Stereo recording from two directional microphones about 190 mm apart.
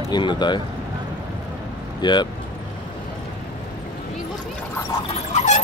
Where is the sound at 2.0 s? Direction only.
25° left (ahead or behind).